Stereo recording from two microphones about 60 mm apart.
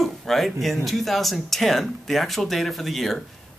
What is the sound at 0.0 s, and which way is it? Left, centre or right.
A man's voice, centre.